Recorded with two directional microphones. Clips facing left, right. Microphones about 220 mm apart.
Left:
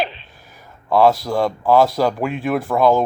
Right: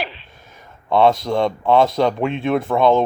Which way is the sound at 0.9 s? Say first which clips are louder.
Even; centre (ahead or behind).